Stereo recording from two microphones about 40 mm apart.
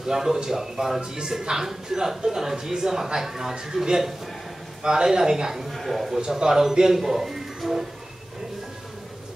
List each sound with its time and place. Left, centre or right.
0.0 s speech: centre
1.1 s speech: centre
5.7 s a sound: centre
6.1 s speech: centre